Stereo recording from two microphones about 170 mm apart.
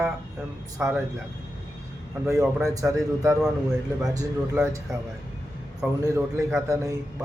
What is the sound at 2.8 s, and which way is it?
Mantra, 20° right (ahead or behind).